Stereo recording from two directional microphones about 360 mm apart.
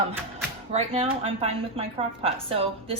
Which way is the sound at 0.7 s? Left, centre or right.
Centre.